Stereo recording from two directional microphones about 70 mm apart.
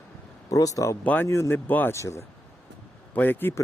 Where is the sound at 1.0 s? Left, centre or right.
Left.